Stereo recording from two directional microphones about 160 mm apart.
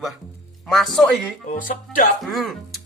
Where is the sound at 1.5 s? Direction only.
60° left (ahead or behind).